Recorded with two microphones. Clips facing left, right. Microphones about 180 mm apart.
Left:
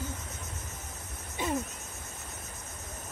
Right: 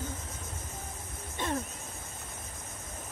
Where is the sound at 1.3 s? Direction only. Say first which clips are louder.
Left 2 dB; 10° left (ahead or behind).